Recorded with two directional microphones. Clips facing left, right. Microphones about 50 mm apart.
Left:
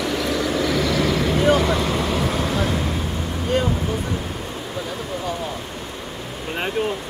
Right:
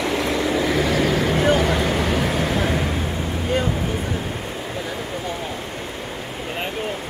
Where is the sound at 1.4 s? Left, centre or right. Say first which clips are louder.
Left 2 dB; right.